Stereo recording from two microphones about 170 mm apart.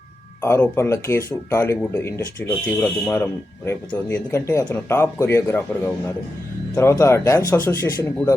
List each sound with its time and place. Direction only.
0.4 s speech: 15° left (ahead or behind)